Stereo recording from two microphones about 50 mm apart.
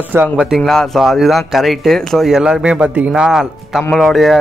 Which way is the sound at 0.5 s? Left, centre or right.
Centre.